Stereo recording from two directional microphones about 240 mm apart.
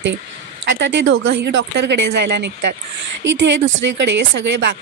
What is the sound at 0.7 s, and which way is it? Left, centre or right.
A woman's voice, right.